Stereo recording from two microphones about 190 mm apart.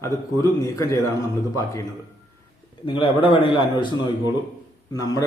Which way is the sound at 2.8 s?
25° left (ahead or behind).